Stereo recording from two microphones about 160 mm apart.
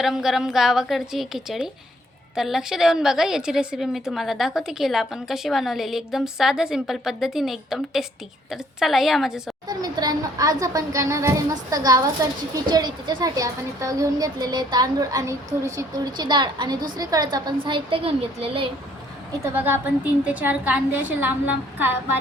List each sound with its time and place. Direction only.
0.0 s a woman's voice: 5° right (ahead or behind)
9.6 s a woman's voice: 25° right (ahead or behind)
19.5 s a woman's voice: 10° right (ahead or behind)